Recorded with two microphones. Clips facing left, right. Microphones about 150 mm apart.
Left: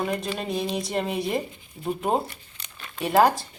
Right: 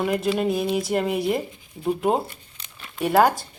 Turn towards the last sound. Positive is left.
turn(degrees=0)  # may be behind; listen again after turning